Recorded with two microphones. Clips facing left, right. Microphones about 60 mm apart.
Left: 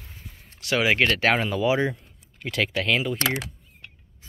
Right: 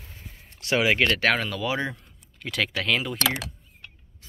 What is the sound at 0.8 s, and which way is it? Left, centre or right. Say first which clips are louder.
Speech: left 1 dB; centre.